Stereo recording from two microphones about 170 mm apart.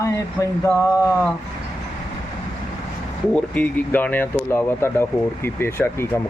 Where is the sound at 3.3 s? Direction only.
10° left (ahead or behind).